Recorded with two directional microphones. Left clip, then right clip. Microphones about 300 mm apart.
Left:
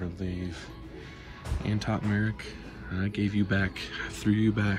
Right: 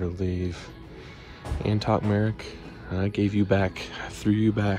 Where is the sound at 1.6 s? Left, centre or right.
Centre.